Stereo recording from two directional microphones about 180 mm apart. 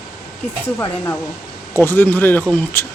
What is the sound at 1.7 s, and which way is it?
Speech, 10° left (ahead or behind).